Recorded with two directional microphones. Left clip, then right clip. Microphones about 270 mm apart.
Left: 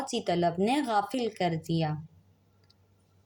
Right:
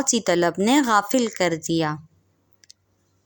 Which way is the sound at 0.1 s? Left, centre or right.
Right.